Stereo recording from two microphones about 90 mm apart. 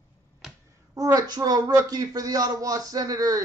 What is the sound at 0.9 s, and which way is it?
Speech, 40° right (ahead or behind).